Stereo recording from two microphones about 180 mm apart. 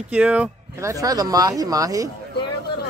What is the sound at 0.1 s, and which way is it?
Speech, 5° right (ahead or behind).